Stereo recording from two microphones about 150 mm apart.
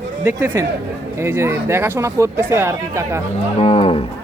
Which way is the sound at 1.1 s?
20° right (ahead or behind).